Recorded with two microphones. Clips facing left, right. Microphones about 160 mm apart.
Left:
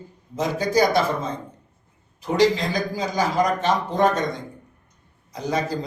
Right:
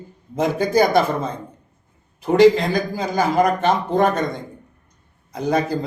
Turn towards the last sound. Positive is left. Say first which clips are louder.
# right 5 dB
turn(degrees=-55)  # may be behind; listen again after turning